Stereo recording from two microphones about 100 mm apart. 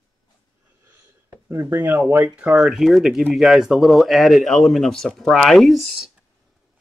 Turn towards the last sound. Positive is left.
turn(degrees=0)  # may be behind; listen again after turning